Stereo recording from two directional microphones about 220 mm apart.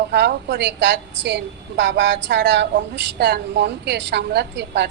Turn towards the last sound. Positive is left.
turn(degrees=-50)  # may be behind; listen again after turning